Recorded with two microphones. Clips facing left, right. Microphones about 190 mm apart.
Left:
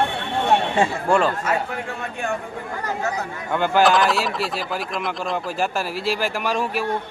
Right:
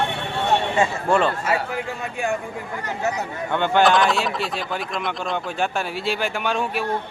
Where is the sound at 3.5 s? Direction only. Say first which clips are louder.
Even; 5° left (ahead or behind).